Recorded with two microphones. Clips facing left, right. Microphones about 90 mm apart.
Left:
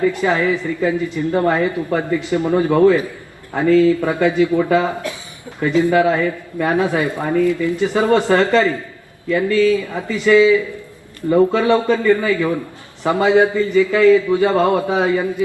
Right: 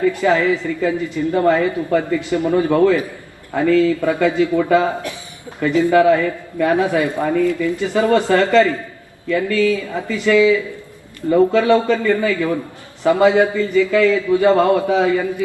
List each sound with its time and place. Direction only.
0.1 s a man's voice: 25° left (ahead or behind)